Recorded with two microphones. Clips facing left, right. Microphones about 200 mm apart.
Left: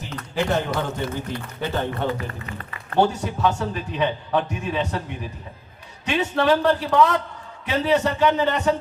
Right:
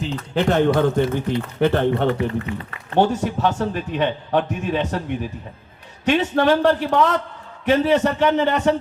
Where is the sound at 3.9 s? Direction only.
50° right (ahead or behind).